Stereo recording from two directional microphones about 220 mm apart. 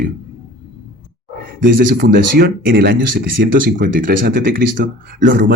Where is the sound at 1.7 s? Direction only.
45° right (ahead or behind).